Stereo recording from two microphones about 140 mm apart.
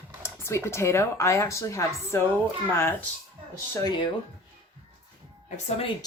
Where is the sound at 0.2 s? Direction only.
20° left (ahead or behind).